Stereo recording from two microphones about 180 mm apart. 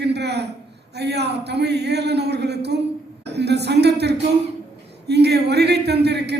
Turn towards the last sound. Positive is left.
turn(degrees=-65)  # may be behind; listen again after turning